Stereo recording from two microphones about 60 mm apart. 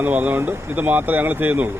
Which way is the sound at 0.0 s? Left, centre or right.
Right.